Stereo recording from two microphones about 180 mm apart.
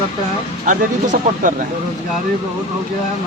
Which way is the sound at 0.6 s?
45° right (ahead or behind).